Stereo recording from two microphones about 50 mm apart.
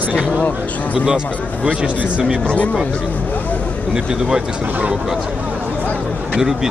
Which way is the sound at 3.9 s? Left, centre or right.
Centre.